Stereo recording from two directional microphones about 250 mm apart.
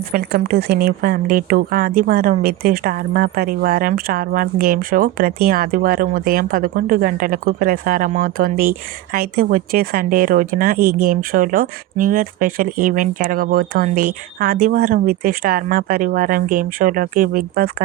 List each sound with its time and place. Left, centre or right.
0.1 s a woman's voice: right